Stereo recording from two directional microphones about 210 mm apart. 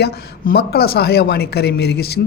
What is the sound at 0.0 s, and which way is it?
Speech, 50° left (ahead or behind).